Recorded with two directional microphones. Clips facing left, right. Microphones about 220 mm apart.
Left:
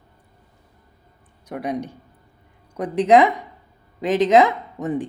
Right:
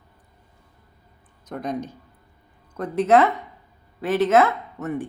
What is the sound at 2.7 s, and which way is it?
Speech, 15° left (ahead or behind).